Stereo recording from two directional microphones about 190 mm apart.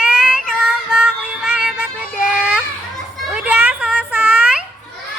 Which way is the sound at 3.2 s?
5° right (ahead or behind).